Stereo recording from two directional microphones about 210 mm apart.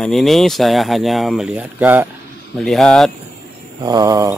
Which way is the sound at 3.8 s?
20° right (ahead or behind).